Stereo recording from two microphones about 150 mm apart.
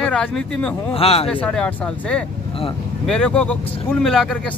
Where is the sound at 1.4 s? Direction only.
5° left (ahead or behind).